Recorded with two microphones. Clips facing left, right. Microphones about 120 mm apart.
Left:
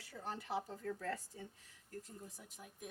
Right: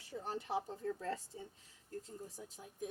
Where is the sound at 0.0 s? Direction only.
25° right (ahead or behind).